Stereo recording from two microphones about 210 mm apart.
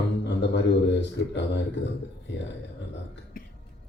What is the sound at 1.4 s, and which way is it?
Speech, 55° left (ahead or behind).